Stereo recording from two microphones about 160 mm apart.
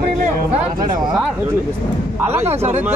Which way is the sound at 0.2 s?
55° right (ahead or behind).